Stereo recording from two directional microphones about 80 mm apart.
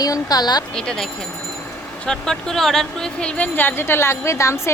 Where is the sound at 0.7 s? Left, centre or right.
Centre.